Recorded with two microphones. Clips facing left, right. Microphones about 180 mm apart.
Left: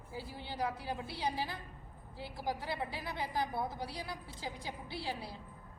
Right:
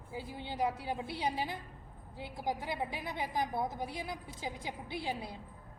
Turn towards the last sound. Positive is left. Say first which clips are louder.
# right 3 dB
turn(degrees=-20)  # may be behind; listen again after turning